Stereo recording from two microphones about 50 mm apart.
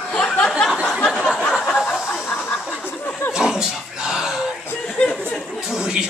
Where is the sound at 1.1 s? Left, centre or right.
Centre.